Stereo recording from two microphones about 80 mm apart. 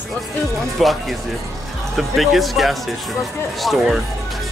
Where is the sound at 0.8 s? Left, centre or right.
Centre.